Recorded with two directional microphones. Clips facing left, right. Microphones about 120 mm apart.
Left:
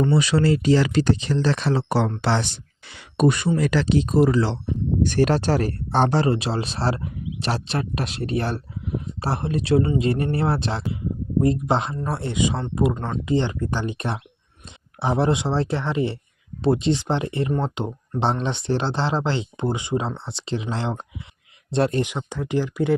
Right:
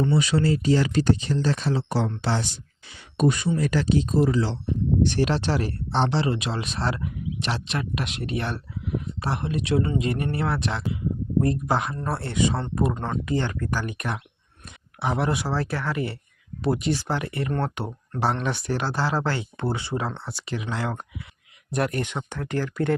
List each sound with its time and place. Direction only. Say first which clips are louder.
0.0 s speech: left 3 dB; 85° left; by 4.5 s 65° left (ahead or behind)
5.0 s speech: left 8 dB; 45° left (ahead or behind); by 10.8 s 30° left (ahead or behind)
11.3 s speech: left 3 dB; 20° left (ahead or behind)
11.9 s speech: left 1 dB; 15° left (ahead or behind)
12.9 s speech: left 1 dB; centre (ahead or behind)
13.2 s speech: left 7 dB; 20° left (ahead or behind)
22.0 s speech: left 3 dB; 10° left (ahead or behind)